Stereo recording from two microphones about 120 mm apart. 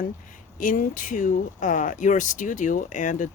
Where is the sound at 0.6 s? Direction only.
90° left.